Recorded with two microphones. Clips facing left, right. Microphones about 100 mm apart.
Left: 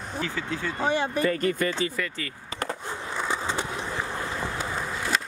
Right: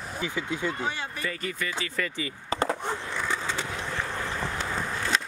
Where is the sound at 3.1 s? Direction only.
20° left (ahead or behind).